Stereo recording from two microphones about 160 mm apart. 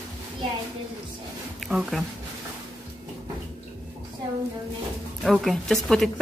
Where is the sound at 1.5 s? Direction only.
Centre (ahead or behind).